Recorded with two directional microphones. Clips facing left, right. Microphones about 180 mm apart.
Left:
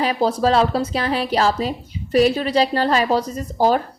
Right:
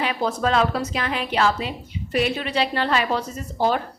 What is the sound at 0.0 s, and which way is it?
A woman's voice, 35° left (ahead or behind).